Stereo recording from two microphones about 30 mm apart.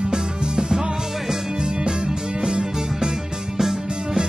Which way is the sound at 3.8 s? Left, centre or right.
Right.